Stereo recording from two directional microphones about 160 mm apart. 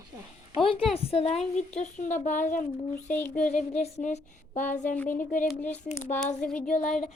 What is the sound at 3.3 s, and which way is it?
A woman's voice, 50° left (ahead or behind).